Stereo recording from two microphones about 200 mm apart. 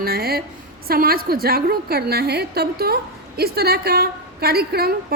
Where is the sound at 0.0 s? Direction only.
50° right (ahead or behind).